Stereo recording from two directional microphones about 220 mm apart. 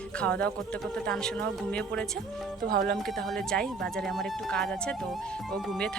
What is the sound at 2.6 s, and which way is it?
Speech, 45° right (ahead or behind).